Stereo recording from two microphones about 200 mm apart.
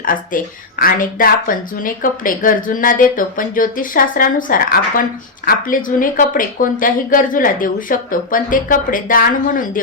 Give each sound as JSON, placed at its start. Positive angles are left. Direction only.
{"t": 0.0, "sound": "speech", "side_deg": 45}